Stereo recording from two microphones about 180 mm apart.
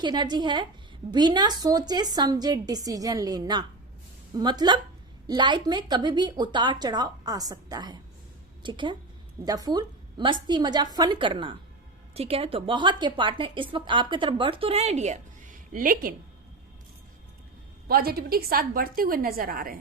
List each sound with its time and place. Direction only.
0.0 s a woman's voice: 25° right (ahead or behind); by 16.1 s 50° right (ahead or behind)
17.8 s a woman's voice: 55° right (ahead or behind)